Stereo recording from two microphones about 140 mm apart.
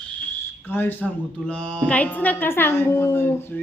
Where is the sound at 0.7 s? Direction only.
15° left (ahead or behind).